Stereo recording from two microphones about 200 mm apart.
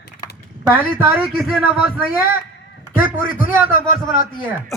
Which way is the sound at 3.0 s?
10° right (ahead or behind).